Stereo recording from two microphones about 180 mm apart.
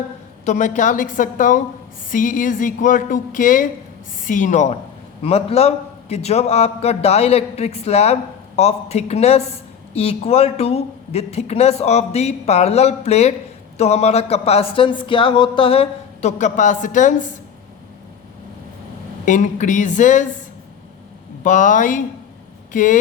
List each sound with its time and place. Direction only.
0.4 s a man's voice: 45° left (ahead or behind)
19.2 s speech: 45° left (ahead or behind)
21.4 s speech: 45° left (ahead or behind)